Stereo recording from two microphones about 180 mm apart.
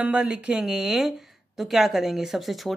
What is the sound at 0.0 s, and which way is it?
Speech, 5° right (ahead or behind).